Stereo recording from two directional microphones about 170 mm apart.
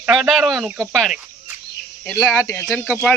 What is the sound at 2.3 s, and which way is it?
Speech, 10° left (ahead or behind).